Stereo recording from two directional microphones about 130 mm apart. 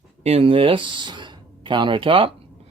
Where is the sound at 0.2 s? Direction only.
50° right (ahead or behind).